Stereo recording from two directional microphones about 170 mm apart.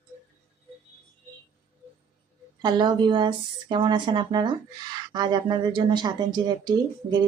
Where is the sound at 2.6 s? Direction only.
25° right (ahead or behind).